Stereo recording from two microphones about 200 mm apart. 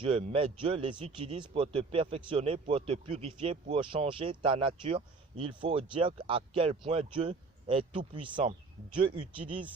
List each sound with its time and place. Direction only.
0.0 s speech: 25° right (ahead or behind)